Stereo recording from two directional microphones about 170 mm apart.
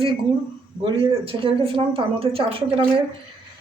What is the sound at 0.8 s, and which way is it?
A woman's voice, 35° right (ahead or behind).